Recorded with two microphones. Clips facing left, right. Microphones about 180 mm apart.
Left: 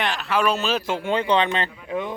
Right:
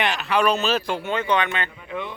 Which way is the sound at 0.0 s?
Centre (ahead or behind).